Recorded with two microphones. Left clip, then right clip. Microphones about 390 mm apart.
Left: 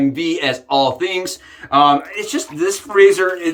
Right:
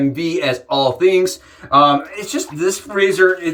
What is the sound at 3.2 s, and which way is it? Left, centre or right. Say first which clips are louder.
Speech: right 5 dB; left.